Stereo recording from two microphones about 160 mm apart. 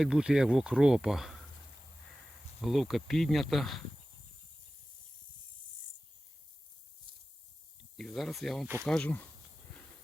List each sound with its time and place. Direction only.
0.0 s speech: 5° right (ahead or behind)
2.6 s speech: centre (ahead or behind)
7.9 s speech: centre (ahead or behind)